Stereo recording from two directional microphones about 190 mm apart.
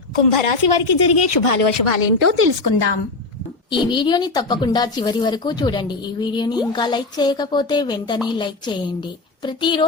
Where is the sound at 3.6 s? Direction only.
25° left (ahead or behind).